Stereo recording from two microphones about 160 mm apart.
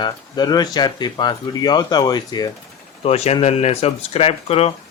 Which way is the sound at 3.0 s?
40° left (ahead or behind).